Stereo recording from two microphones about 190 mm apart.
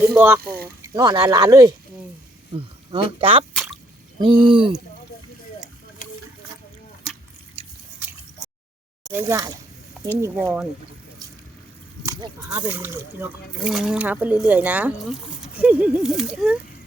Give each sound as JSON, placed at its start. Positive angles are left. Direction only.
{"t": 0.0, "sound": "speech", "side_deg": -10}
{"t": 0.4, "sound": "speech", "side_deg": -50}
{"t": 0.8, "sound": "speech", "side_deg": -20}
{"t": 3.5, "sound": "drip", "side_deg": 0}
{"t": 4.2, "sound": "speech", "side_deg": -25}
{"t": 6.0, "sound": "a sound", "side_deg": 45}
{"t": 7.6, "sound": "drip", "side_deg": -30}
{"t": 9.2, "sound": "speech", "side_deg": -20}
{"t": 12.0, "sound": "speech", "side_deg": -20}